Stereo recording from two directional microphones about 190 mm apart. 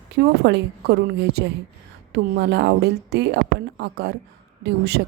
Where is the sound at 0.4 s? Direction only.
60° right (ahead or behind).